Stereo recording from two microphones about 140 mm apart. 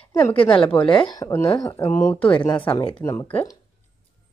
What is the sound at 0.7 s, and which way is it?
Speech, 10° left (ahead or behind).